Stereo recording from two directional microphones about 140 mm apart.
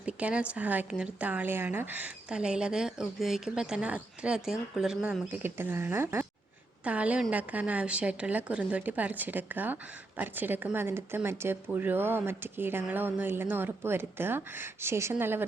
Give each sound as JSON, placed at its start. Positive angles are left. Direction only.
{"t": 0.0, "sound": "speech", "side_deg": -10}
{"t": 5.3, "sound": "speech", "side_deg": -15}